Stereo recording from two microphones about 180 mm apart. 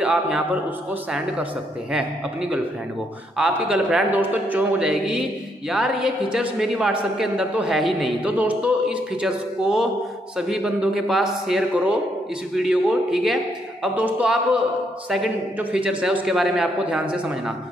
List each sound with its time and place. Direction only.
0.0 s a man's voice: 5° right (ahead or behind)
3.3 s a man's voice: 5° right (ahead or behind)
15.7 s a man's voice: 5° right (ahead or behind)